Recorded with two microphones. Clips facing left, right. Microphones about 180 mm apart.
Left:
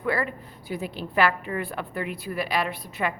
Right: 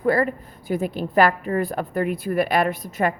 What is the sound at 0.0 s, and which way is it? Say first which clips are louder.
A woman's voice: right 7 dB; 40° right (ahead or behind).